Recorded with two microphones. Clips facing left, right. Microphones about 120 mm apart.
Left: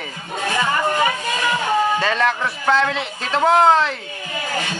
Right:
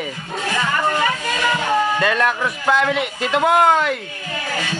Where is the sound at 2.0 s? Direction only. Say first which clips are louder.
Right 1 dB; 5° right (ahead or behind).